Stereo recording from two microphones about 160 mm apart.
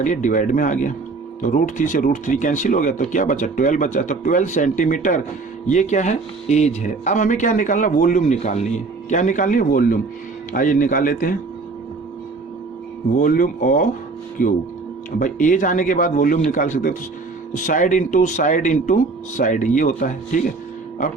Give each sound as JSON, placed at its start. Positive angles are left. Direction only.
{"t": 0.0, "sound": "speech", "side_deg": 50}
{"t": 13.1, "sound": "speech", "side_deg": 60}